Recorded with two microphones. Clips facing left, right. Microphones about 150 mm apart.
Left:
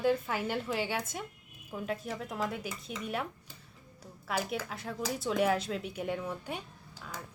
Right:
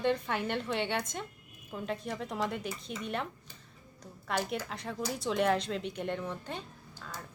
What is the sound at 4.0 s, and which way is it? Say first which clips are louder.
A woman's voice: right 1 dB; 5° left (ahead or behind).